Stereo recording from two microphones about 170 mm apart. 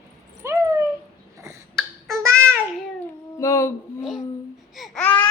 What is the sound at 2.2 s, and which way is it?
Child singing, 15° right (ahead or behind).